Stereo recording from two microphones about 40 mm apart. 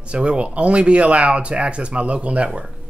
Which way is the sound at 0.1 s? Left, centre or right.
Right.